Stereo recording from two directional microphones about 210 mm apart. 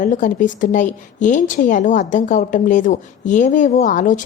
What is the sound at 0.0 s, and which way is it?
A woman's voice, 40° left (ahead or behind).